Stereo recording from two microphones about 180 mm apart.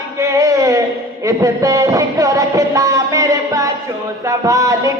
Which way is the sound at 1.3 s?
20° right (ahead or behind).